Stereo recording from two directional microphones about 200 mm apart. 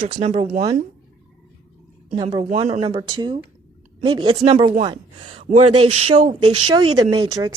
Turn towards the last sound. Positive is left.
turn(degrees=-20)  # may be behind; listen again after turning